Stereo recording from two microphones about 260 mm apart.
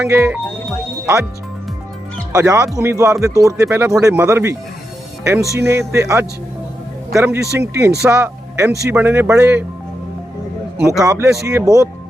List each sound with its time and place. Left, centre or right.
0.0 s speech: centre
2.3 s speech: centre
10.8 s speech: centre